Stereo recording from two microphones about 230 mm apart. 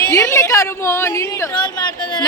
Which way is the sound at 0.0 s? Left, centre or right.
Centre.